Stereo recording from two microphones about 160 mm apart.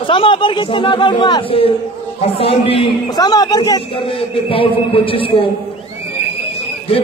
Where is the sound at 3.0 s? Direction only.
25° left (ahead or behind).